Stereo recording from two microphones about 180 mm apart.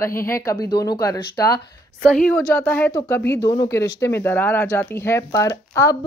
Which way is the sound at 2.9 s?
25° left (ahead or behind).